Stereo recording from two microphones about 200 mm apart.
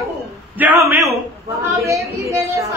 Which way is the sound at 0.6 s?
10° right (ahead or behind).